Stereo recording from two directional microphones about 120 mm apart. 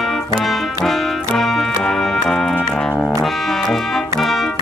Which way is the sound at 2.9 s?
15° left (ahead or behind).